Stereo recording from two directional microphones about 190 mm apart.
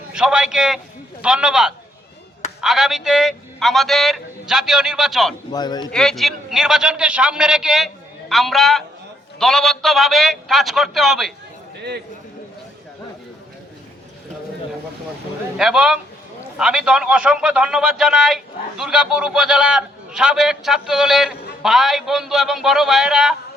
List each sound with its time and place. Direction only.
0.1 s a man's voice: 5° right (ahead or behind)
5.5 s a man's voice: 20° left (ahead or behind)
5.9 s a man's voice: centre (ahead or behind)
11.8 s a man's voice: 60° right (ahead or behind)
15.5 s a man's voice: 5° right (ahead or behind)